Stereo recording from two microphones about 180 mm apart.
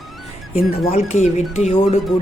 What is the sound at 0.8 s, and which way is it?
Speech, 35° left (ahead or behind).